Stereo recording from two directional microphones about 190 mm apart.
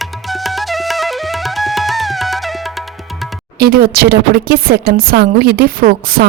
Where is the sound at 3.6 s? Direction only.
50° right (ahead or behind).